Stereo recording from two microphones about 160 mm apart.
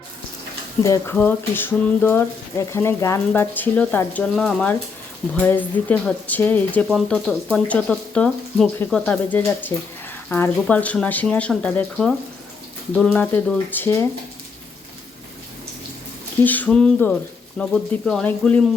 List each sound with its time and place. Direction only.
0.8 s speech: 20° left (ahead or behind)
1.1 s speech: 10° left (ahead or behind)
16.4 s speech: 10° left (ahead or behind)